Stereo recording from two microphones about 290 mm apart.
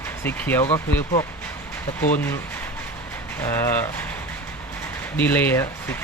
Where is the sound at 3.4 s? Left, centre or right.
Centre.